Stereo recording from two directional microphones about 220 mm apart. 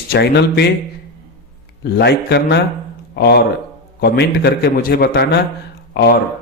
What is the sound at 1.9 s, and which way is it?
Speech, 50° left (ahead or behind).